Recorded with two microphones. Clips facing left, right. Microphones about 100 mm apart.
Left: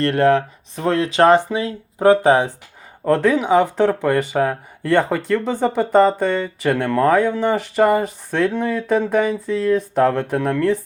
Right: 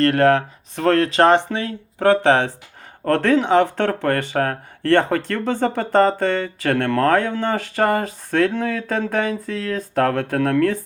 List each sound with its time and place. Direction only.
0.2 s speech: 40° right (ahead or behind)
1.5 s speech: 15° left (ahead or behind)